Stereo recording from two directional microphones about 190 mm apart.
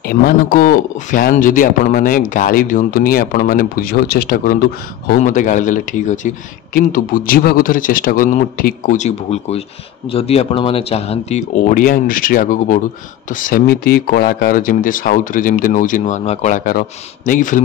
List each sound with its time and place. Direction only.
0.0 s a man's voice: 50° left (ahead or behind)